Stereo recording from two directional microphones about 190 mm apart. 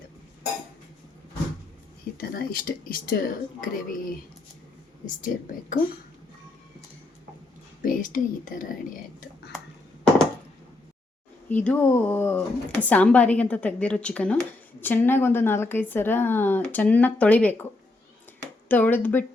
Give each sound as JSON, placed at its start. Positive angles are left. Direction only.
{"t": 2.2, "sound": "speech", "side_deg": 50}
{"t": 7.8, "sound": "speech", "side_deg": 45}
{"t": 11.4, "sound": "speech", "side_deg": 10}
{"t": 18.7, "sound": "speech", "side_deg": 10}